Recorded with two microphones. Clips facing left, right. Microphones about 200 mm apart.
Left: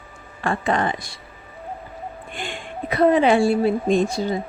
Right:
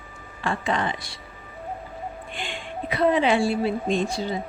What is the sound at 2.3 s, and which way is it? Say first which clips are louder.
A woman's voice: left 2 dB; 45° left (ahead or behind).